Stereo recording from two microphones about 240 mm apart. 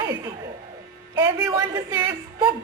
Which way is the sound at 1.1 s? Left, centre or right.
Centre.